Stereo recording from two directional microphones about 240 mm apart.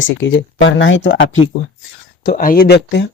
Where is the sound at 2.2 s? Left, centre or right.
Left.